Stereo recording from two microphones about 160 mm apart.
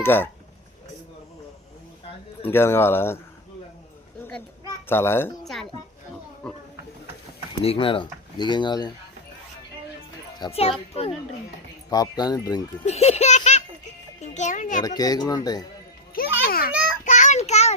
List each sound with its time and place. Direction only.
0.0 s speech: 15° left (ahead or behind)
2.4 s speech: 15° left (ahead or behind)
4.2 s children playing: 10° left (ahead or behind)
4.9 s speech: 15° left (ahead or behind)
6.4 s speech: 5° left (ahead or behind)
7.6 s speech: 35° left (ahead or behind)
10.5 s a child's voice: 40° left (ahead or behind)
11.9 s speech: 25° left (ahead or behind)
12.8 s baby laughter: 40° left (ahead or behind)
14.2 s a child's voice: 50° left (ahead or behind)
14.8 s speech: 25° left (ahead or behind)
16.4 s a child's voice: 65° left (ahead or behind)
17.0 s child singing: 50° left (ahead or behind)